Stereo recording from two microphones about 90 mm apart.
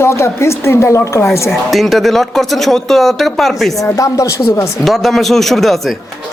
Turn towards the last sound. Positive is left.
turn(degrees=0)  # may be behind; listen again after turning